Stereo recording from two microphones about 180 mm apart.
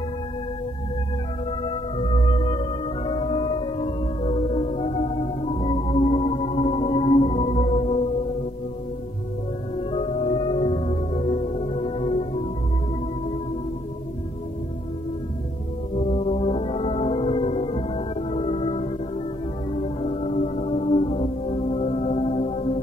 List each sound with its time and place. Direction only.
1.6 s music: 30° left (ahead or behind)
9.8 s music: 30° left (ahead or behind)
16.0 s music: 35° left (ahead or behind)